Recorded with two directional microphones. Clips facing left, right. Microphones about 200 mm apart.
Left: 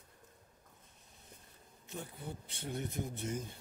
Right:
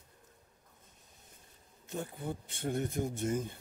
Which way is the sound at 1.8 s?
50° right (ahead or behind).